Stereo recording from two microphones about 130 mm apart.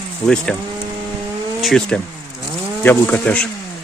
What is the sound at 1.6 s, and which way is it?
Speech, 5° left (ahead or behind).